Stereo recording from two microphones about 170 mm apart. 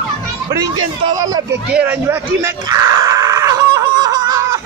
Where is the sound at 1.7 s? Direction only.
10° right (ahead or behind).